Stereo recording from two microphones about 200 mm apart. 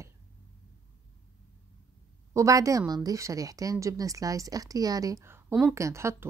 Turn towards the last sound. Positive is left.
turn(degrees=-15)  # may be behind; listen again after turning